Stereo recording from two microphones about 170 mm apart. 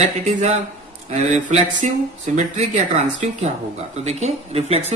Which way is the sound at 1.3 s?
45° right (ahead or behind).